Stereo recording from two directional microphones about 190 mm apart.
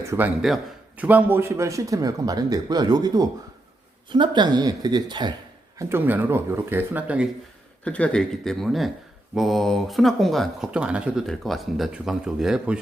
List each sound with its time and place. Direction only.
0.0 s a man's voice: 15° right (ahead or behind)
5.8 s a man's voice: 10° right (ahead or behind)
7.9 s speech: 5° left (ahead or behind)